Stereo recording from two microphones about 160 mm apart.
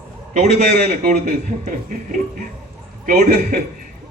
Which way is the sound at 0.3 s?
60° right (ahead or behind).